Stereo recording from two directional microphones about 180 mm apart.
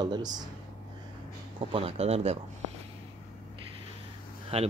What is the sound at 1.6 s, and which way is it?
Speech, 30° right (ahead or behind).